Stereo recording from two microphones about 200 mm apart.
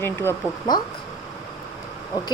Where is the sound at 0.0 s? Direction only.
10° left (ahead or behind).